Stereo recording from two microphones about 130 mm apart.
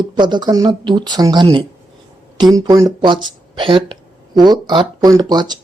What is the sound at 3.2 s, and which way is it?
Speech, 40° right (ahead or behind).